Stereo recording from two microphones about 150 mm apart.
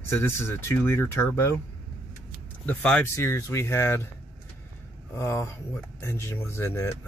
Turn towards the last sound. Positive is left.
turn(degrees=15)  # may be behind; listen again after turning